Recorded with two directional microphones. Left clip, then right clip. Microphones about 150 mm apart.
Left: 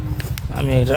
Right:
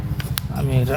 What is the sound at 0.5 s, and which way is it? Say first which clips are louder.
Speech: left 6 dB; 50° left (ahead or behind).